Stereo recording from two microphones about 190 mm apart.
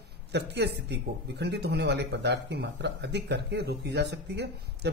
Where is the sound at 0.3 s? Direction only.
60° right (ahead or behind).